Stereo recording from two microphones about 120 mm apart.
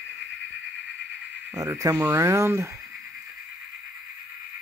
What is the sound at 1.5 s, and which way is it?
Speech, 30° right (ahead or behind).